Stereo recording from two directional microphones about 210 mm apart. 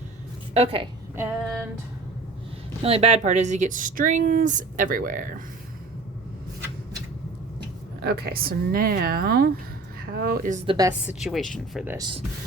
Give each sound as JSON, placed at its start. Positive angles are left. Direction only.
{"t": 0.5, "sound": "a woman's voice", "side_deg": -30}
{"t": 2.8, "sound": "speech", "side_deg": -30}
{"t": 8.0, "sound": "speech", "side_deg": -50}
{"t": 10.7, "sound": "a woman's voice", "side_deg": -15}
{"t": 11.1, "sound": "speech", "side_deg": 0}
{"t": 11.9, "sound": "a woman's voice", "side_deg": -20}